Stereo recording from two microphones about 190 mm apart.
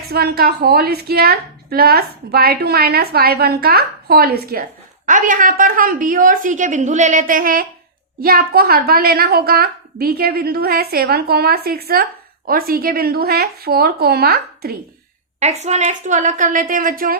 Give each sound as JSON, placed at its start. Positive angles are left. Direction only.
{"t": 0.1, "sound": "a woman's voice", "side_deg": -55}
{"t": 15.4, "sound": "a woman's voice", "side_deg": -35}